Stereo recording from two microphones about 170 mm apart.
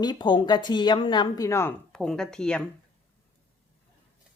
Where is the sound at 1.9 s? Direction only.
5° left (ahead or behind).